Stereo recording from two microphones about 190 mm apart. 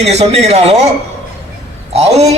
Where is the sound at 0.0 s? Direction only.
35° right (ahead or behind).